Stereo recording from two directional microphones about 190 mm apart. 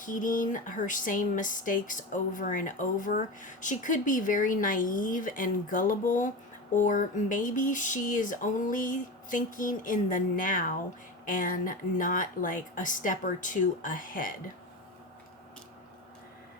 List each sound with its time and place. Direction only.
0.0 s speech: 45° left (ahead or behind)